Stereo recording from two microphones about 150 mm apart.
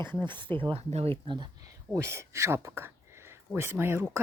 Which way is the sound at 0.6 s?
40° right (ahead or behind).